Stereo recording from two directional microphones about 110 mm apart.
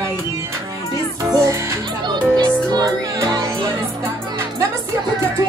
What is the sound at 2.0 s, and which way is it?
Music, 40° right (ahead or behind).